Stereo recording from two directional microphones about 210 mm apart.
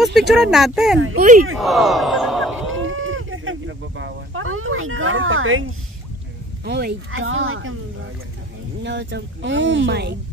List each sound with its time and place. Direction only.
0.0 s speech: centre (ahead or behind)
0.9 s speech: 80° right
1.6 s speech: centre (ahead or behind)
2.7 s livestock: 70° right (ahead or behind)
6.6 s speech: 50° right (ahead or behind)
7.1 s speech: 70° right (ahead or behind)
8.8 s speech: 55° right (ahead or behind)